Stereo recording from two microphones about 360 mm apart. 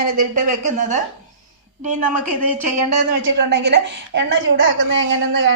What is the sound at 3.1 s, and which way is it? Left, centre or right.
A woman's voice, right.